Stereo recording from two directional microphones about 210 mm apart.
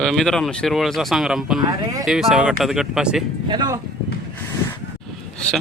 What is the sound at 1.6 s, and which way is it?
Speech, 15° right (ahead or behind).